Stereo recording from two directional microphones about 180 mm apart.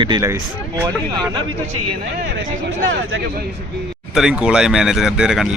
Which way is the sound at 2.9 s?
90° right.